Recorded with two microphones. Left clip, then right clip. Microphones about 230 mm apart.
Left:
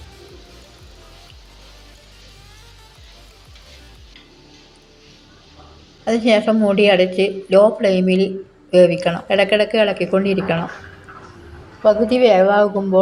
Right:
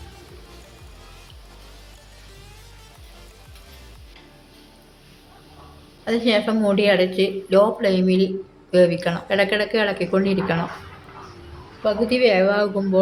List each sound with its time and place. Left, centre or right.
6.1 s speech: centre
11.8 s speech: centre